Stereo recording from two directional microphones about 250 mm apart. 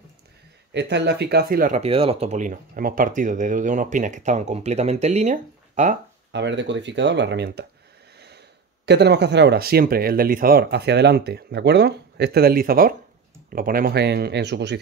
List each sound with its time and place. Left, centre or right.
0.7 s speech: right
6.3 s speech: right
8.8 s speech: right